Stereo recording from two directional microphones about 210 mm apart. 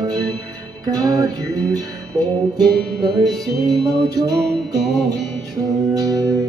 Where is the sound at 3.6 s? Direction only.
20° right (ahead or behind).